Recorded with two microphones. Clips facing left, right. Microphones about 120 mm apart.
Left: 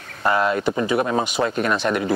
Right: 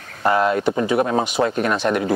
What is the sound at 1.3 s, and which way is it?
Speech, 35° right (ahead or behind).